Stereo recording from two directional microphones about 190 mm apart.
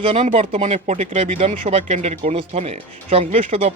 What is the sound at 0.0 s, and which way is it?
Speech, 30° right (ahead or behind).